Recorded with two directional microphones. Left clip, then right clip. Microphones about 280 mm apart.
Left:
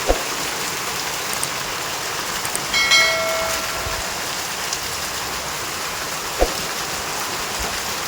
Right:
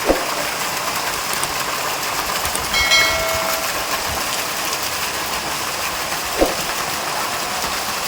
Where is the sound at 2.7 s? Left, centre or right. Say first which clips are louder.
Even; centre.